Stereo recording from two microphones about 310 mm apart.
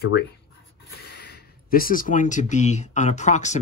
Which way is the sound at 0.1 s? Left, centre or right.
Left.